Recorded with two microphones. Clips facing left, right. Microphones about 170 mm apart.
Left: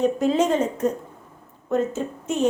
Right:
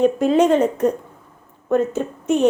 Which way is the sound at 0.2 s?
65° right (ahead or behind).